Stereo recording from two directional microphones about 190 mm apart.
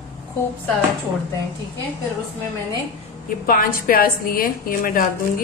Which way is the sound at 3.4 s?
50° left (ahead or behind).